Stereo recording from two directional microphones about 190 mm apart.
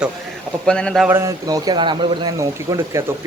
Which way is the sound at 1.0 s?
15° right (ahead or behind).